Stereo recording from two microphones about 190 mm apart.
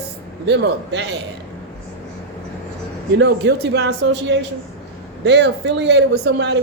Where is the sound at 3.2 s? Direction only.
60° right (ahead or behind).